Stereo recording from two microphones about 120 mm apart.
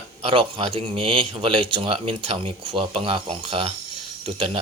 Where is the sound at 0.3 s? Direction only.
50° right (ahead or behind).